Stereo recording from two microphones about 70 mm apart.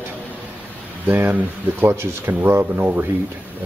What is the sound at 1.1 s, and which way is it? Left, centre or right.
Speech, right.